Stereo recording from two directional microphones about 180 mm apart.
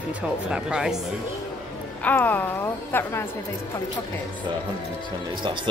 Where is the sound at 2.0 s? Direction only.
10° left (ahead or behind).